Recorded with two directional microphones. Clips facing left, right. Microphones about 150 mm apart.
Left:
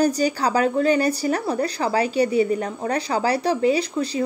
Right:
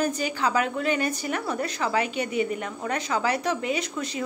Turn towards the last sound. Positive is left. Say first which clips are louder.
# left 7 dB
turn(degrees=35)  # may be behind; listen again after turning